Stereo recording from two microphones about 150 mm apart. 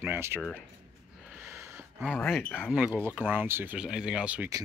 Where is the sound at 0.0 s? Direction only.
15° right (ahead or behind).